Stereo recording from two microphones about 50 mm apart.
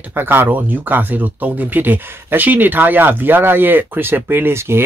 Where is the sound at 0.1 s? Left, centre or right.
Right.